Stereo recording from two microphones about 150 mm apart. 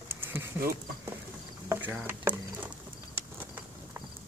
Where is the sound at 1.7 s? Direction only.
15° right (ahead or behind).